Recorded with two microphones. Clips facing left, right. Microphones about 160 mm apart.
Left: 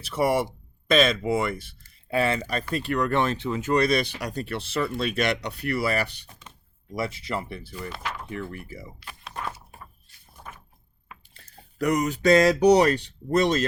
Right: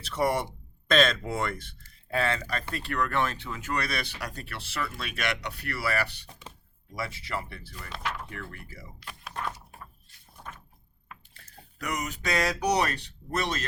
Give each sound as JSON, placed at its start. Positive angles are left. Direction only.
{"t": 0.0, "sound": "speech", "side_deg": 10}
{"t": 7.8, "sound": "speech", "side_deg": 0}
{"t": 8.3, "sound": "speech", "side_deg": 20}
{"t": 9.0, "sound": "a sound", "side_deg": 5}
{"t": 11.4, "sound": "speech", "side_deg": 35}